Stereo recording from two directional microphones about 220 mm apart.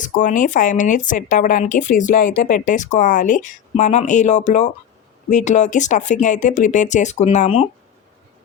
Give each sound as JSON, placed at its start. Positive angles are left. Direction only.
{"t": 0.0, "sound": "speech", "side_deg": 35}